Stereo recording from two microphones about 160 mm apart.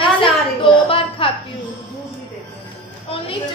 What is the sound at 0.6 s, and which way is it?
Speech, 35° left (ahead or behind).